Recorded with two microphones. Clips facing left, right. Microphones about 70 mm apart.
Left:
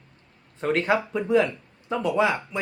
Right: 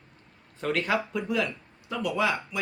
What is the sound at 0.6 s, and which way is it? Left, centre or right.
Speech, left.